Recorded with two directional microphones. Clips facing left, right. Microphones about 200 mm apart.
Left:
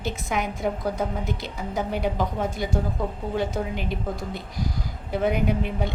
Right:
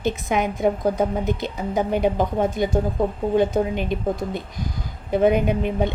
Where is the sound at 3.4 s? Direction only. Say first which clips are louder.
Right 7 dB; 20° right (ahead or behind).